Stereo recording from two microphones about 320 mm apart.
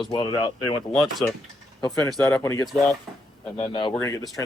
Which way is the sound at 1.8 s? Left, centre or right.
Centre.